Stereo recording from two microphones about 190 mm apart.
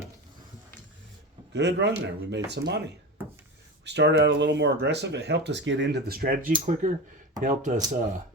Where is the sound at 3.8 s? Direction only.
65° right (ahead or behind); by 7.8 s 40° right (ahead or behind).